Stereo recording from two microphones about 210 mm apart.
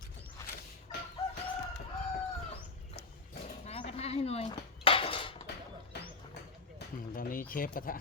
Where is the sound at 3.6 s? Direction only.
30° left (ahead or behind).